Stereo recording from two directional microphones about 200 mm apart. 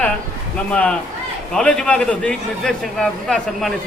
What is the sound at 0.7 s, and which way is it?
A man's voice, 5° left (ahead or behind).